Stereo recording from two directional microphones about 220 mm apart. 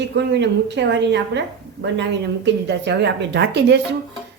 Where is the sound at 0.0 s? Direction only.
50° right (ahead or behind).